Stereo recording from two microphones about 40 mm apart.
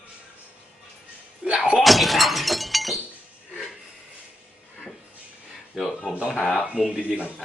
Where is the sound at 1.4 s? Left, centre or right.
Centre.